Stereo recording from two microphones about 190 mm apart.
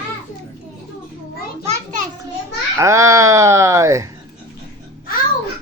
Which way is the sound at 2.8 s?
15° right (ahead or behind).